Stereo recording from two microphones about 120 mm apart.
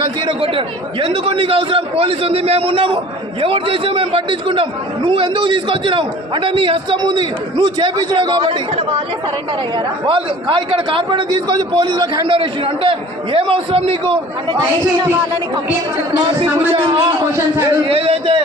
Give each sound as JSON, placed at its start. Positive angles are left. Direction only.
{"t": 0.0, "sound": "a man's voice", "side_deg": -45}
{"t": 16.7, "sound": "a man's voice", "side_deg": -45}